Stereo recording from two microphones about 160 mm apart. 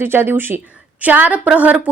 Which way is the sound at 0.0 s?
15° right (ahead or behind).